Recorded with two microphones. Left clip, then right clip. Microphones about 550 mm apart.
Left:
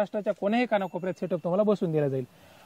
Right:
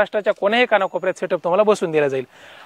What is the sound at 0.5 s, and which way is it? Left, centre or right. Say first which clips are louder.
Speech: right 10 dB; right.